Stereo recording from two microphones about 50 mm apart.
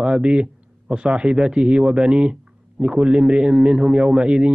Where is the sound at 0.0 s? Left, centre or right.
Centre.